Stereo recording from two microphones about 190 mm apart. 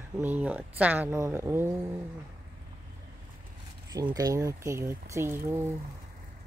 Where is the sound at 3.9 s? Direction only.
20° right (ahead or behind).